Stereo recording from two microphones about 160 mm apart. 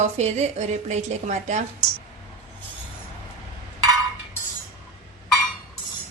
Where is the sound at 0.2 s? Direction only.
45° right (ahead or behind).